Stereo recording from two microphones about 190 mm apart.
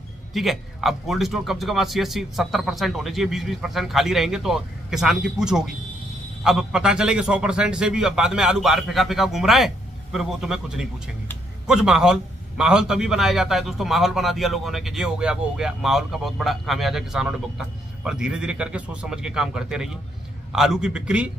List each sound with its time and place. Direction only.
0.3 s a man's voice: centre (ahead or behind)